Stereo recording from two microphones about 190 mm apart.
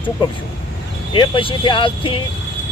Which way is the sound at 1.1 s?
25° left (ahead or behind).